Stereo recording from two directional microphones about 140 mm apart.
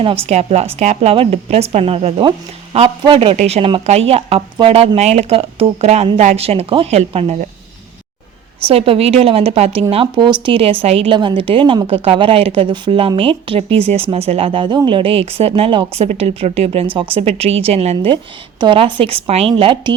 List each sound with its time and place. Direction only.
0.0 s a woman's voice: 45° right (ahead or behind)
8.6 s a woman's voice: 40° right (ahead or behind)